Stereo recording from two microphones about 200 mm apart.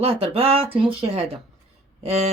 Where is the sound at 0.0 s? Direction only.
30° right (ahead or behind).